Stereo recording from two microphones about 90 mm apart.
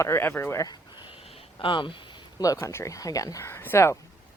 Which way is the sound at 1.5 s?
65° left (ahead or behind).